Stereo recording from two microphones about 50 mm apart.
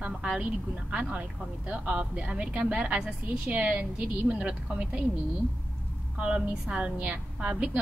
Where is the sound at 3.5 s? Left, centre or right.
Right.